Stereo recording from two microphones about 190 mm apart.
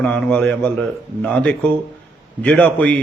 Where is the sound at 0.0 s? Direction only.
10° left (ahead or behind).